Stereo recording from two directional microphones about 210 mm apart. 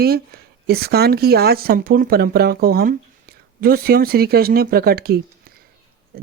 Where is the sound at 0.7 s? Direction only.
50° right (ahead or behind).